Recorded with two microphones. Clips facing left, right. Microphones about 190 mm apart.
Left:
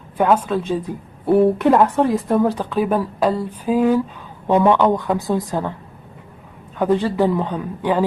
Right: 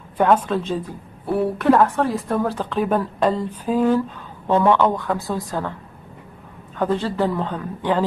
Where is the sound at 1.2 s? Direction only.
25° left (ahead or behind).